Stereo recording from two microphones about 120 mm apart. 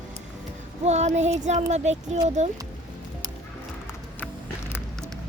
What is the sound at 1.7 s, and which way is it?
Speech, 70° right (ahead or behind).